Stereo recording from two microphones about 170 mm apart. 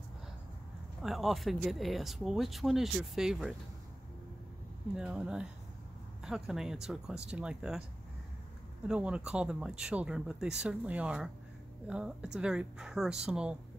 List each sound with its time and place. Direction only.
1.0 s speech: centre (ahead or behind)
4.9 s speech: 5° right (ahead or behind)
8.8 s speech: 5° right (ahead or behind)